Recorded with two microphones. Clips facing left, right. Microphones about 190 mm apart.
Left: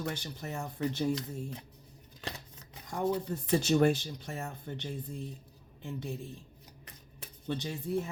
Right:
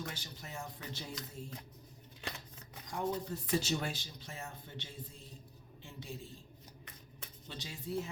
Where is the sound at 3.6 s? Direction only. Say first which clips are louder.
Left 12 dB; 55° left (ahead or behind).